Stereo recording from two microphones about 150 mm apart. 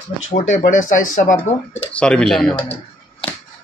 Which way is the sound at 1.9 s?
10° left (ahead or behind).